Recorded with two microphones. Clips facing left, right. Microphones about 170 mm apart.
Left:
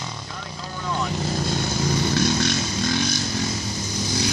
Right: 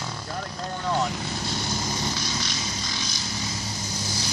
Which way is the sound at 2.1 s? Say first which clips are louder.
Left 11 dB; 55° left (ahead or behind).